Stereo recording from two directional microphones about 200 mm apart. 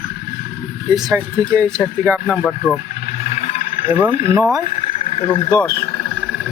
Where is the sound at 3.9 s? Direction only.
10° right (ahead or behind).